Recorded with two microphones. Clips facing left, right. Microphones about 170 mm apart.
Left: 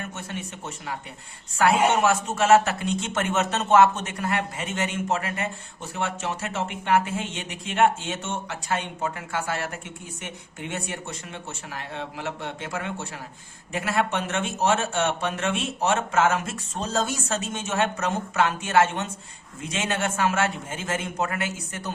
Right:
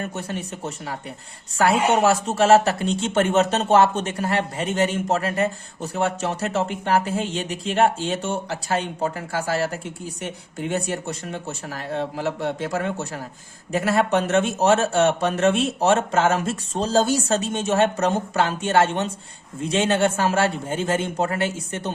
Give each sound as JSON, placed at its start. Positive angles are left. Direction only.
{"t": 0.0, "sound": "speech", "side_deg": -35}